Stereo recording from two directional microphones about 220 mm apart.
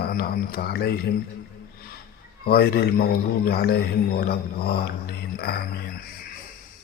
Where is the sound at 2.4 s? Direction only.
45° left (ahead or behind).